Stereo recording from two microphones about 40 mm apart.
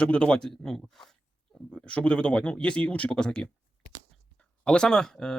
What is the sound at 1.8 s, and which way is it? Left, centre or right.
Speech, left.